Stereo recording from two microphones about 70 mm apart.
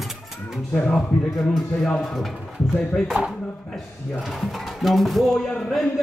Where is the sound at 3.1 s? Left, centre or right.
Right.